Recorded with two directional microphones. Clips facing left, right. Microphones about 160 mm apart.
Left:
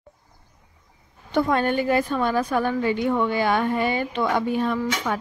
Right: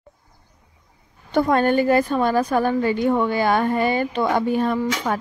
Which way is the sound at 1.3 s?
40° right (ahead or behind).